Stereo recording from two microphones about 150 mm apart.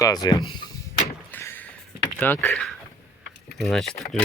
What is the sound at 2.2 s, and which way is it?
Speech, 10° left (ahead or behind).